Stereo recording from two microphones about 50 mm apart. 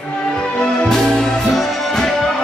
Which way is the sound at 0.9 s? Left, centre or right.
Centre.